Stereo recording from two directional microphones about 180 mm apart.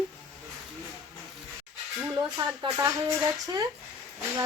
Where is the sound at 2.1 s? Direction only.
20° right (ahead or behind).